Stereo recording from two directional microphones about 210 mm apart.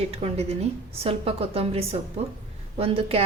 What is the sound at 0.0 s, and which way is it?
A woman's voice, 30° right (ahead or behind).